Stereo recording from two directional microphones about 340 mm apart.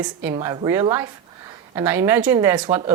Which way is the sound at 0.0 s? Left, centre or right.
Centre.